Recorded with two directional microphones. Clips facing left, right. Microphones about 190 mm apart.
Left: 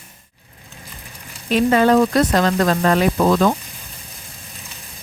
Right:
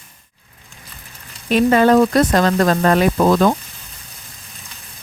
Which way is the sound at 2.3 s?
50° right (ahead or behind).